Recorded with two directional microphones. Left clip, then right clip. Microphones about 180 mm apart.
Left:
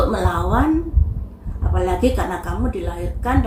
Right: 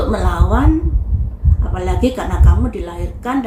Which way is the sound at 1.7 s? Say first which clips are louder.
Even; 15° right (ahead or behind).